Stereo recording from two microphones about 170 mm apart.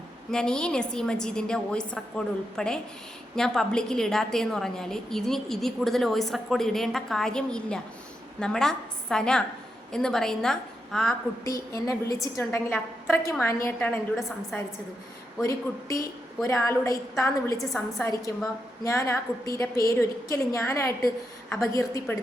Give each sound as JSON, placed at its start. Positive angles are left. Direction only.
{"t": 0.3, "sound": "a woman's voice", "side_deg": 5}
{"t": 11.4, "sound": "a woman's voice", "side_deg": 20}
{"t": 15.4, "sound": "a woman's voice", "side_deg": 20}
{"t": 17.7, "sound": "a woman's voice", "side_deg": 0}
{"t": 18.0, "sound": "a woman's voice", "side_deg": 20}